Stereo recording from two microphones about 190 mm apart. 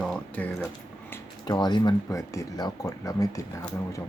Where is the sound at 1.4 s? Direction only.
20° left (ahead or behind).